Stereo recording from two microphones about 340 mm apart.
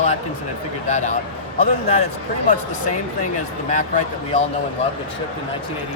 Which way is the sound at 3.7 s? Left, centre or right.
Left.